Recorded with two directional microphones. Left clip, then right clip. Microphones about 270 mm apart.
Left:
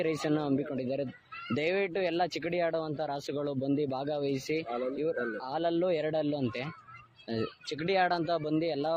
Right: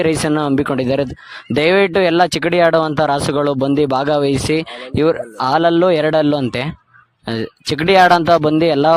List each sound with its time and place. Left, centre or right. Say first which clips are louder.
0.0 s speech: right 15 dB; right